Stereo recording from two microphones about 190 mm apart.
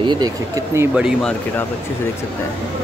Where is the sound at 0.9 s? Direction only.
5° right (ahead or behind).